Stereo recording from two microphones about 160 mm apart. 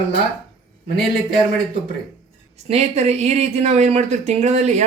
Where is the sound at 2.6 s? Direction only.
45° right (ahead or behind).